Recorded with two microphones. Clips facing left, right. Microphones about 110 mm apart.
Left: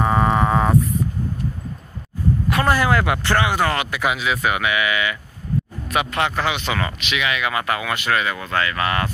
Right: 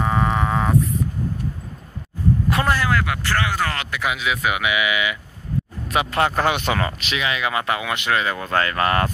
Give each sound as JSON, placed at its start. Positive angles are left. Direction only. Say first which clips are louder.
{"t": 0.0, "sound": "a sound", "louder": "left 3 dB", "side_deg": 5}
{"t": 2.7, "sound": "speech", "louder": "left 3 dB", "side_deg": 20}
{"t": 5.9, "sound": "speech", "louder": "right 2 dB", "side_deg": -35}
{"t": 8.3, "sound": "speech", "louder": "right 1 dB", "side_deg": -35}